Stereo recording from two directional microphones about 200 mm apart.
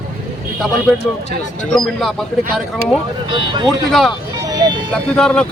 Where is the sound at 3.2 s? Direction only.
25° right (ahead or behind).